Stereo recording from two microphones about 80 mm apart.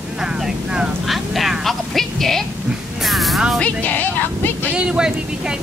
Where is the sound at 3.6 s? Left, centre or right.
Centre.